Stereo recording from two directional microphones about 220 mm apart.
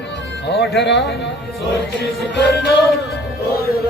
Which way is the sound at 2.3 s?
50° left (ahead or behind).